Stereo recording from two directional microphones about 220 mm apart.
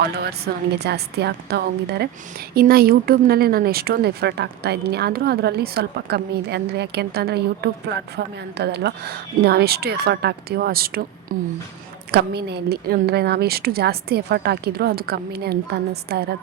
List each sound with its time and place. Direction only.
0.0 s a woman's voice: 45° right (ahead or behind)